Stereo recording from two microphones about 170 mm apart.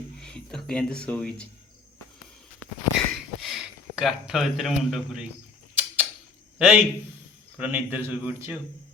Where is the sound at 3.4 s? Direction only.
5° right (ahead or behind).